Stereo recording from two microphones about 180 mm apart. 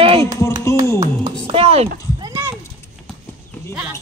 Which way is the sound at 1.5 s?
35° right (ahead or behind).